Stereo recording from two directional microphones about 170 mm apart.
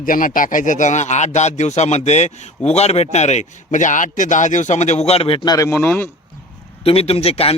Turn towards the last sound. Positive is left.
turn(degrees=35)  # may be behind; listen again after turning